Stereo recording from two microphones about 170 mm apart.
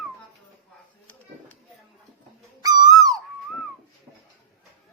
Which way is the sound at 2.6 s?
20° right (ahead or behind).